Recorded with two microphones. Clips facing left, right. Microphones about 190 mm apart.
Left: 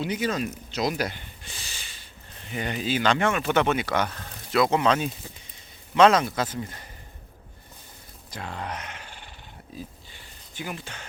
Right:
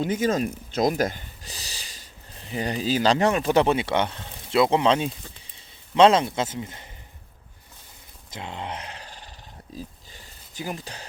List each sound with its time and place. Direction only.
0.0 s speech: 45° right (ahead or behind); by 6.8 s 20° right (ahead or behind)
8.3 s grunt: 20° right (ahead or behind); by 9.3 s 35° right (ahead or behind)
9.7 s pig: 40° right (ahead or behind)